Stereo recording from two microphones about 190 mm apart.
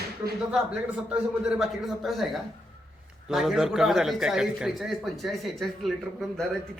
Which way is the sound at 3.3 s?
Centre (ahead or behind).